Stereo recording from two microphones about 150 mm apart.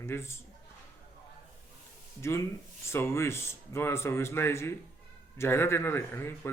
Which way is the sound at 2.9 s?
15° left (ahead or behind).